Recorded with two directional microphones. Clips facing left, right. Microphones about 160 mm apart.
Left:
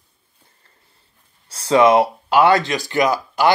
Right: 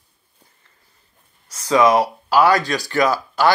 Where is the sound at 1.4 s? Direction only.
30° left (ahead or behind).